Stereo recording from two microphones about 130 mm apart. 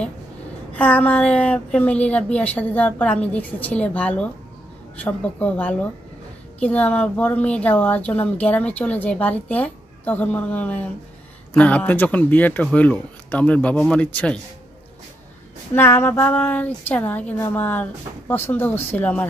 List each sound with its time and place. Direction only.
0.7 s a woman's voice: 10° left (ahead or behind)
15.7 s a woman's voice: 15° left (ahead or behind)